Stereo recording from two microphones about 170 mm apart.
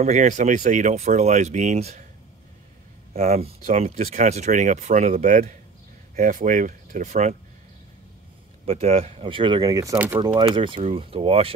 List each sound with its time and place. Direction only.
0.0 s speech: 45° right (ahead or behind)
3.1 s speech: 40° right (ahead or behind)
8.6 s speech: 35° right (ahead or behind)
9.9 s speech: 10° right (ahead or behind)
10.2 s speech: 25° right (ahead or behind)